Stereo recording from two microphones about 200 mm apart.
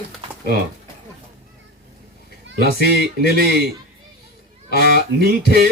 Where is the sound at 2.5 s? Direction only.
55° right (ahead or behind).